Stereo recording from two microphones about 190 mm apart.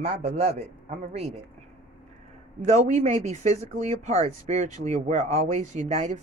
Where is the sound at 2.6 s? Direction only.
35° right (ahead or behind).